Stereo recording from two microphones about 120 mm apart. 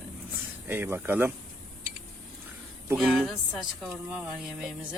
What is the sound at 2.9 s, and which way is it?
Speech, centre (ahead or behind).